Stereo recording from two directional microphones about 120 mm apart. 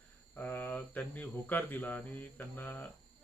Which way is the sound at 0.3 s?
15° left (ahead or behind).